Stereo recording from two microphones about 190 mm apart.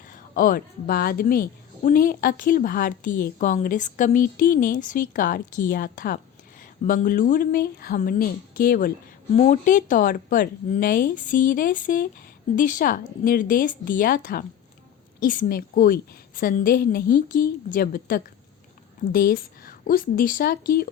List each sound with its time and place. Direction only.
0.1 s a woman's voice: 50° left (ahead or behind)
9.3 s a woman's voice: 40° left (ahead or behind)